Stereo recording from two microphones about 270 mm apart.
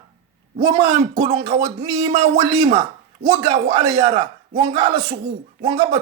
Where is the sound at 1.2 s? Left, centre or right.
Right.